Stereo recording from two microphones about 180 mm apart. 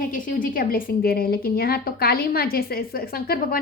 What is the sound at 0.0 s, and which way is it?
A woman's voice, 50° left (ahead or behind).